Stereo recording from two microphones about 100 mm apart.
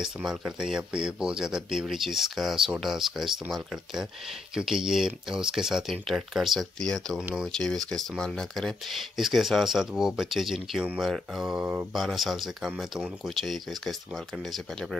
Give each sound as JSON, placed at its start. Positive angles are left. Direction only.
{"t": 0.0, "sound": "speech", "side_deg": -5}
{"t": 11.9, "sound": "speech", "side_deg": 0}